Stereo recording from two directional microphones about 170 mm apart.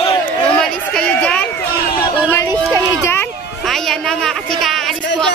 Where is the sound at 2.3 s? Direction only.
20° left (ahead or behind).